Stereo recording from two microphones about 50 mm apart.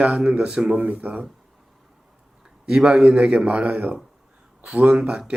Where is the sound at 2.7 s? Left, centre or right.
Centre.